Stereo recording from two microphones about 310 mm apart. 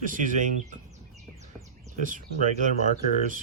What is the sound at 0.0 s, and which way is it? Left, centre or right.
Speech, right.